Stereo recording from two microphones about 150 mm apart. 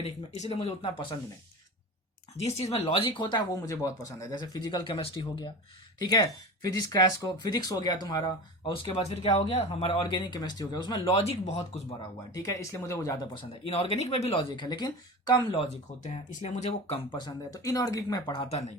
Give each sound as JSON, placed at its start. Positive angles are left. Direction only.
{"t": 0.0, "sound": "speech", "side_deg": 40}
{"t": 2.4, "sound": "speech", "side_deg": 45}
{"t": 11.2, "sound": "speech", "side_deg": 45}
{"t": 12.3, "sound": "speech", "side_deg": 20}
{"t": 13.5, "sound": "speech", "side_deg": 40}
{"t": 16.0, "sound": "speech", "side_deg": 50}
{"t": 17.2, "sound": "speech", "side_deg": 25}